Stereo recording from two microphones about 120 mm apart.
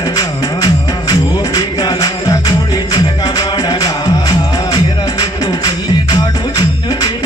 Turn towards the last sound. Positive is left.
turn(degrees=35)  # may be behind; listen again after turning